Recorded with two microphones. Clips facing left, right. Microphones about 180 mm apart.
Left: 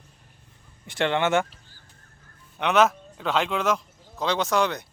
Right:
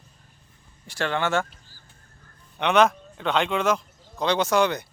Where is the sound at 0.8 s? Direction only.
20° left (ahead or behind).